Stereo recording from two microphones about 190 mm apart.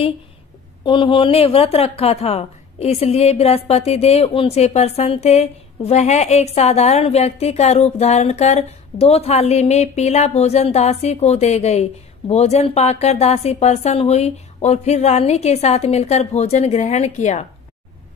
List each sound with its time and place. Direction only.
0.8 s a woman's voice: 25° left (ahead or behind)